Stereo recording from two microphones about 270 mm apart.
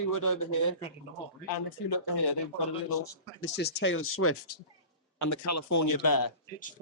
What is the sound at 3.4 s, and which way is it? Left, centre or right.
Speech, left.